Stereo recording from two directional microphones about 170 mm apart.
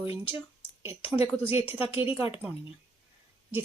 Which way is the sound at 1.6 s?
35° left (ahead or behind).